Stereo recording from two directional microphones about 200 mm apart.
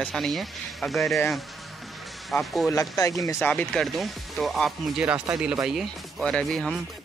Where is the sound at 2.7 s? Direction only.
15° left (ahead or behind).